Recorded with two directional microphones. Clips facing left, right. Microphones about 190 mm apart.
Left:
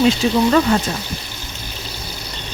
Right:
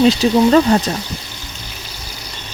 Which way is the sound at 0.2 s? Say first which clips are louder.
Right 3 dB; 35° right (ahead or behind).